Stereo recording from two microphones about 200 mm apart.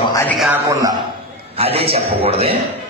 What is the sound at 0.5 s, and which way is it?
Speech, 15° right (ahead or behind).